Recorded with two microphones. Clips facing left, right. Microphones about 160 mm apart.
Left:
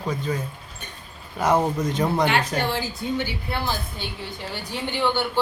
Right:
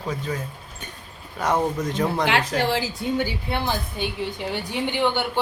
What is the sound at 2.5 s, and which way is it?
Speech, 90° right.